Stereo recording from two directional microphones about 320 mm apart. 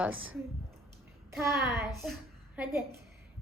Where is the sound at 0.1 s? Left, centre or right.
Right.